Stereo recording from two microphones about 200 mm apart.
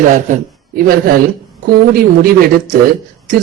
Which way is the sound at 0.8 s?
45° right (ahead or behind).